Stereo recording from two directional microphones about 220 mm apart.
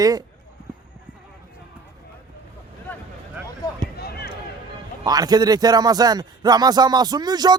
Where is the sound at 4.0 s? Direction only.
45° left (ahead or behind).